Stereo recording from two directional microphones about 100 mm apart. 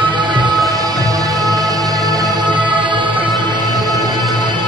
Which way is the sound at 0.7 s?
35° right (ahead or behind).